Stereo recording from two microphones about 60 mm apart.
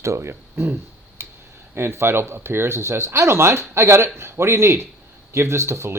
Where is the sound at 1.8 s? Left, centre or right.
Right.